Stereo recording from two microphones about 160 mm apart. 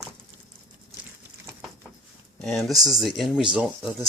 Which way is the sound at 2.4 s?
Centre (ahead or behind).